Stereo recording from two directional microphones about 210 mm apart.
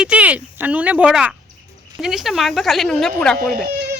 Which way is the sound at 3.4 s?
45° right (ahead or behind).